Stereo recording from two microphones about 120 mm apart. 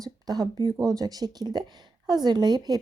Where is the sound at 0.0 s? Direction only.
35° right (ahead or behind).